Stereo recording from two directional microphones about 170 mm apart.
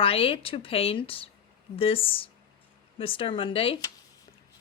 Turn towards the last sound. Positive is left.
turn(degrees=30)  # may be behind; listen again after turning